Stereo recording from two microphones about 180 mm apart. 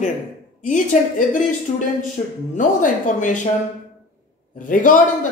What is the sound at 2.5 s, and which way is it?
Speech, 45° left (ahead or behind).